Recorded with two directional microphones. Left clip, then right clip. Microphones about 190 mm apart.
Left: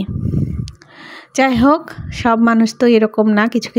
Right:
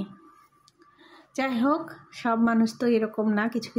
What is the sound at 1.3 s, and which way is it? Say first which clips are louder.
Speech: left 13 dB; 45° left (ahead or behind).